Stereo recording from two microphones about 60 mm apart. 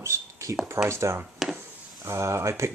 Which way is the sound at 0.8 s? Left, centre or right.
Right.